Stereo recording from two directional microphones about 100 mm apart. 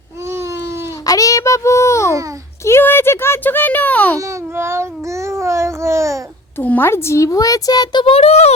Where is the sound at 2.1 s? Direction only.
35° right (ahead or behind).